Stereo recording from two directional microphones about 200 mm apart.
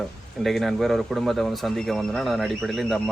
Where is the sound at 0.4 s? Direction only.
Centre (ahead or behind).